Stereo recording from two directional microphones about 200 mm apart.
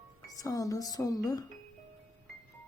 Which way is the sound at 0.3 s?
15° left (ahead or behind).